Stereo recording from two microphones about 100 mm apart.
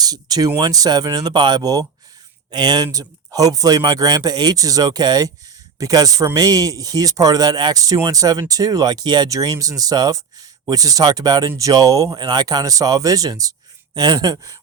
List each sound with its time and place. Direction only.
0.0 s speech: 40° right (ahead or behind)